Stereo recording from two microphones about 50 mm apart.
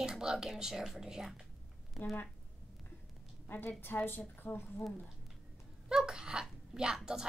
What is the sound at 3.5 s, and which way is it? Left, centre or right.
A woman's voice, left.